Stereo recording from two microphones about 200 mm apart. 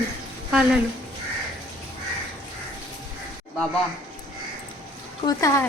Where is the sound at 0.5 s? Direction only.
5° right (ahead or behind).